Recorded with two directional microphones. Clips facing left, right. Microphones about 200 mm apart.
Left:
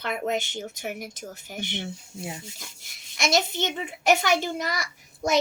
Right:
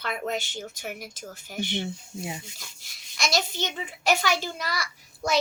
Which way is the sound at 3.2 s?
20° left (ahead or behind).